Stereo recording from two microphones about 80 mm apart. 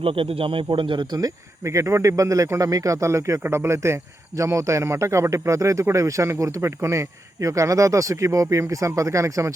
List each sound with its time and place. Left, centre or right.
0.7 s speech: right
1.2 s speech: right